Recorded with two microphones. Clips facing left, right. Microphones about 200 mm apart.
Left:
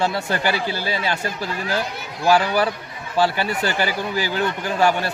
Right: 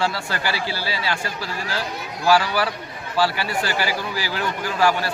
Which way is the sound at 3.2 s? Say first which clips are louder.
Left 2 dB; 20° left (ahead or behind).